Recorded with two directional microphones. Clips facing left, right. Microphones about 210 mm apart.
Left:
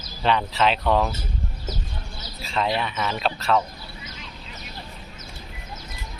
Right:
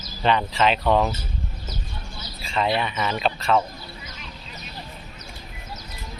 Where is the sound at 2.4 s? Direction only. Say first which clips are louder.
Right 1 dB; centre (ahead or behind).